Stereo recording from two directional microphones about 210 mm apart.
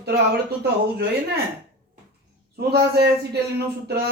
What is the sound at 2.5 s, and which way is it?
A man's voice, 50° right (ahead or behind).